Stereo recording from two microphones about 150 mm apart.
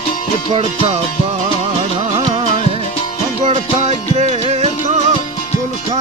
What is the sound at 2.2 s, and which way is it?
Music, 40° right (ahead or behind).